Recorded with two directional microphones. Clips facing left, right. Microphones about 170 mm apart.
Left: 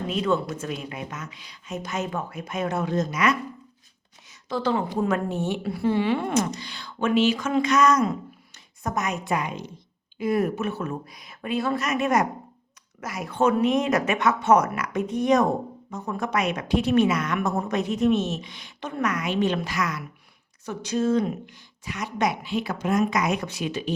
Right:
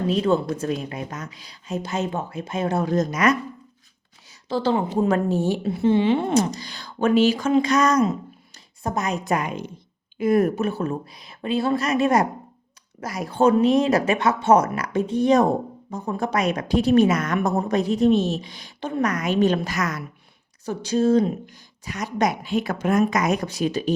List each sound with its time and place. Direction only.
0.1 s a woman's voice: 35° right (ahead or behind)
4.4 s a woman's voice: 30° right (ahead or behind)
5.6 s a woman's voice: 20° right (ahead or behind); by 20.0 s 45° right (ahead or behind)
20.7 s a woman's voice: 35° right (ahead or behind)